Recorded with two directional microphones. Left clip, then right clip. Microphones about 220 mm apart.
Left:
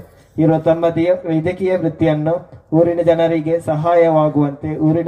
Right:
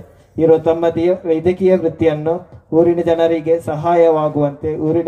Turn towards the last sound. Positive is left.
turn(degrees=-55)  # may be behind; listen again after turning